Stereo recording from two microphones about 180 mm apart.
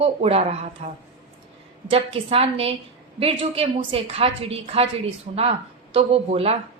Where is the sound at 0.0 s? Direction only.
35° right (ahead or behind).